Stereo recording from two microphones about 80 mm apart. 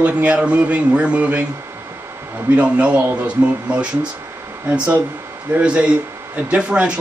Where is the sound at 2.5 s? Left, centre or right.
Centre.